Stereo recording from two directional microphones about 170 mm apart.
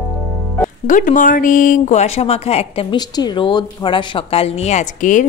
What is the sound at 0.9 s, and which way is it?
Speech, 50° left (ahead or behind).